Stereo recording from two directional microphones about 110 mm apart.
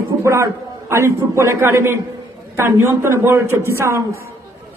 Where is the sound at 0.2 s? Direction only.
25° right (ahead or behind).